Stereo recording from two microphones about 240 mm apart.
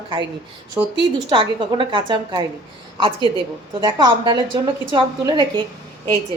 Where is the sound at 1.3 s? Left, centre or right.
Centre.